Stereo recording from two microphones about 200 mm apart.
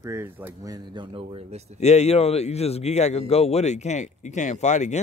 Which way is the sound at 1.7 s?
35° left (ahead or behind).